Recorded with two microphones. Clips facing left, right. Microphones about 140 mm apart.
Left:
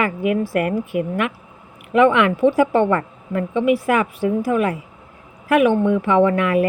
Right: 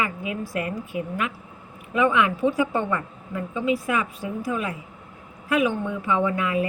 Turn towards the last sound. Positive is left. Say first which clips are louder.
# left 8 dB
turn(degrees=70)  # may be behind; listen again after turning